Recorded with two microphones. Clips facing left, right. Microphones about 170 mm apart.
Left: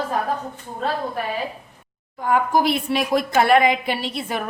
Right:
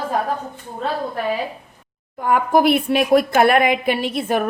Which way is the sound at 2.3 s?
60° right (ahead or behind).